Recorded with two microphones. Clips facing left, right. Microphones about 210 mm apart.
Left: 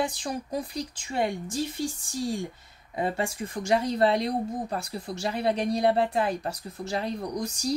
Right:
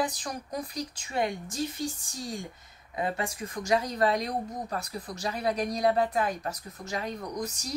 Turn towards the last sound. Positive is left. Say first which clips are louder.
# left 5 dB
turn(degrees=30)  # may be behind; listen again after turning